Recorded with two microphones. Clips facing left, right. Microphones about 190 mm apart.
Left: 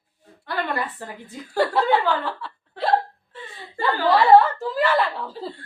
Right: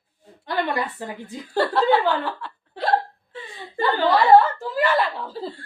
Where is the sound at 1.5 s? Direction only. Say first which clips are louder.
Even; 5° left (ahead or behind).